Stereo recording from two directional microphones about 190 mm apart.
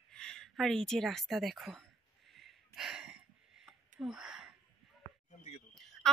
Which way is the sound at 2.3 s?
Centre (ahead or behind).